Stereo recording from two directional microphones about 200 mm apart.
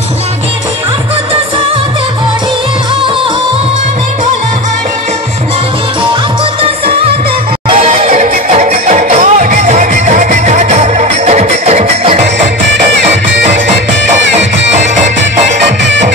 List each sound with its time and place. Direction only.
7.7 s music: 30° right (ahead or behind)